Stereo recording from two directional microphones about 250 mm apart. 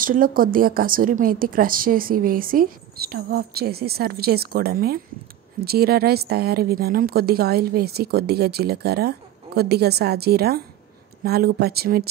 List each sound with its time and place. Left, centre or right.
0.0 s a woman's voice: right